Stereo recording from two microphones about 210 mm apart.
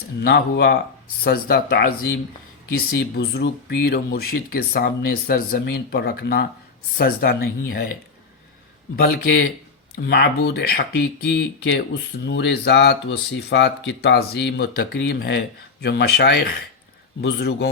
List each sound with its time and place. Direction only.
0.2 s speech: 50° left (ahead or behind)
10.1 s speech: 50° left (ahead or behind)